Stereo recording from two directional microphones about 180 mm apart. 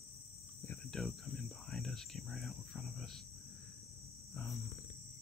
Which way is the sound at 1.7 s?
5° left (ahead or behind).